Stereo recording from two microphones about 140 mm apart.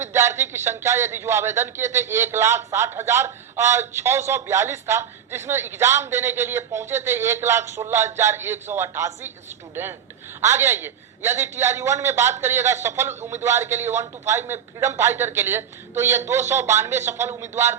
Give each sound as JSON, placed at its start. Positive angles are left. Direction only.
{"t": 0.0, "sound": "a man's voice", "side_deg": -20}
{"t": 10.4, "sound": "a man's voice", "side_deg": -20}